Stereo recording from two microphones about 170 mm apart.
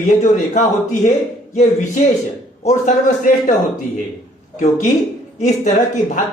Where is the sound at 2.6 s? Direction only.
45° left (ahead or behind).